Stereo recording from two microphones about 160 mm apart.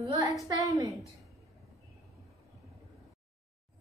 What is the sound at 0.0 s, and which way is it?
Speech, 20° right (ahead or behind).